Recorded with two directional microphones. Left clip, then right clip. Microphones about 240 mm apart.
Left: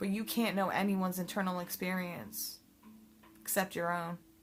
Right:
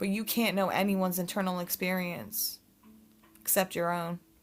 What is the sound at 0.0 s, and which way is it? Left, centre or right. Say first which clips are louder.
Speech: right 5 dB; right.